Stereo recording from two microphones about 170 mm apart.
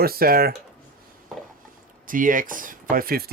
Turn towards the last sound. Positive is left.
turn(degrees=-60)  # may be behind; listen again after turning